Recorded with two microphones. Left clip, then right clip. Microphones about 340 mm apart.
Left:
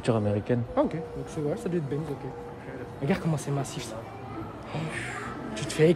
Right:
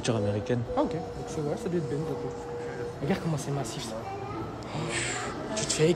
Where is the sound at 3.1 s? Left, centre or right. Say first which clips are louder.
Left 3 dB; left.